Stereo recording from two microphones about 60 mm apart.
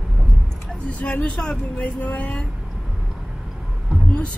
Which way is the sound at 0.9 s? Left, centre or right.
Left.